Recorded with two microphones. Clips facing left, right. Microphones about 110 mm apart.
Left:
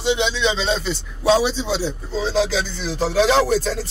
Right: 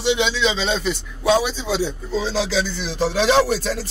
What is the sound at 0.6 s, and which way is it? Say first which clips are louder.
Speech: even; 30° left (ahead or behind).